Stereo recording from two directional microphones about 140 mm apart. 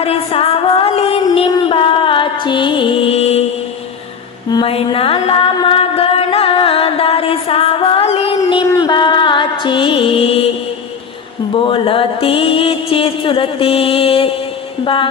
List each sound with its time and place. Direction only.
0.0 s music: 45° left (ahead or behind)
4.5 s mantra: 40° left (ahead or behind)
8.6 s music: 25° left (ahead or behind); by 10.5 s 45° left (ahead or behind)
11.5 s mantra: 40° left (ahead or behind)